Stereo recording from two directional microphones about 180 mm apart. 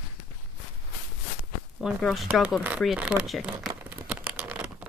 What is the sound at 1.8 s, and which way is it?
Speech, centre (ahead or behind).